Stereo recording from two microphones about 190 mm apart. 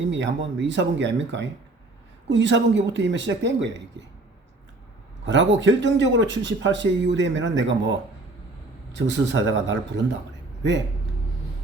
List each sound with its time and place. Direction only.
0.0 s speech: 70° right (ahead or behind)
5.2 s speech: 70° right (ahead or behind)
9.0 s speech: 70° right (ahead or behind)